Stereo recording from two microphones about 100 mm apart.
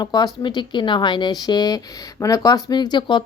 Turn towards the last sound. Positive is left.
turn(degrees=45)  # may be behind; listen again after turning